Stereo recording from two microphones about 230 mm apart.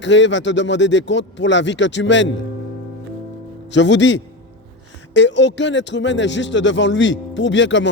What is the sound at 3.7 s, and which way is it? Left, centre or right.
Speech, left.